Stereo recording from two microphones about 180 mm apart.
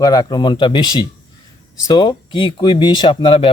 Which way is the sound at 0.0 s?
20° left (ahead or behind).